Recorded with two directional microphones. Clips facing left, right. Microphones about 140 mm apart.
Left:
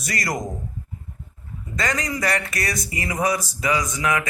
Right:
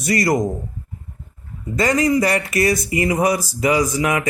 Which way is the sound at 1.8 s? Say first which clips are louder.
Right 9 dB; 30° right (ahead or behind).